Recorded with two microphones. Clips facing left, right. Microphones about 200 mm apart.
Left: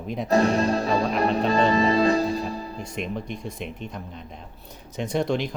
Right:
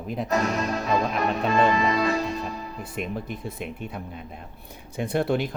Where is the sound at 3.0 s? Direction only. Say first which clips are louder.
Even; 5° right (ahead or behind).